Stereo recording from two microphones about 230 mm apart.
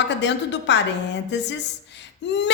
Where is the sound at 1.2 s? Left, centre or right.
Left.